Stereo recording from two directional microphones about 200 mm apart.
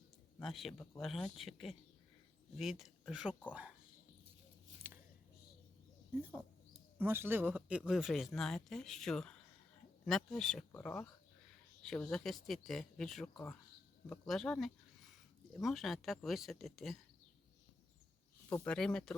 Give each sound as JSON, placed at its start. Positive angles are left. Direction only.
{"t": 0.3, "sound": "a man's voice", "side_deg": 0}
{"t": 7.0, "sound": "speech", "side_deg": -10}
{"t": 18.4, "sound": "speech", "side_deg": 10}